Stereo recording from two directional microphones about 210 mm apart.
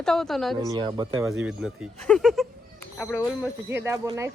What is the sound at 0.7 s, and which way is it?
Speech, 20° right (ahead or behind).